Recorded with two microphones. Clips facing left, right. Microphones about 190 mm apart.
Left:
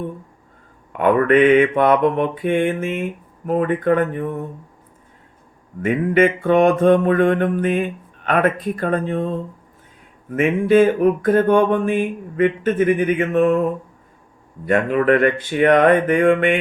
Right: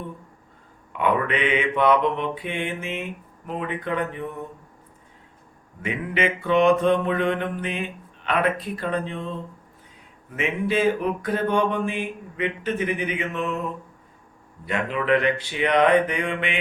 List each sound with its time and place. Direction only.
0.9 s mantra: 50° left (ahead or behind)
5.8 s mantra: 50° left (ahead or behind)